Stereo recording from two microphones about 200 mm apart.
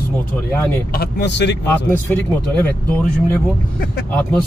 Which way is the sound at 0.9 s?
55° left (ahead or behind).